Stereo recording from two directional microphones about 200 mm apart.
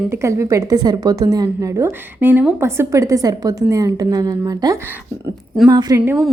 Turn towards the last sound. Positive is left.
turn(degrees=-10)  # may be behind; listen again after turning